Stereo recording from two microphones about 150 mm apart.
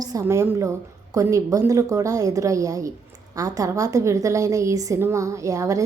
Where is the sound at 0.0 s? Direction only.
20° right (ahead or behind).